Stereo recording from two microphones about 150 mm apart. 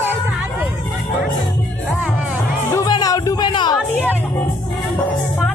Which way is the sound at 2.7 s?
25° left (ahead or behind).